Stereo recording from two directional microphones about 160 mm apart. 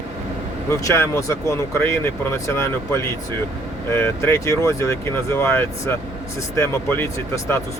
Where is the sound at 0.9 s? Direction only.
20° left (ahead or behind).